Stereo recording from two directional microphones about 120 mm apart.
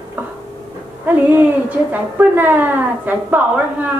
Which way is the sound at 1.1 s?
15° right (ahead or behind).